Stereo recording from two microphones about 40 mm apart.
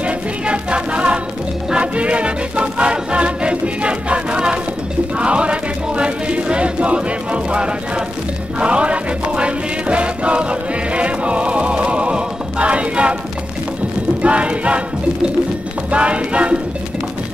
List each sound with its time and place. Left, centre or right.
0.0 s music: right
5.2 s choir: right
8.5 s music: right
14.2 s choir: right
15.9 s music: right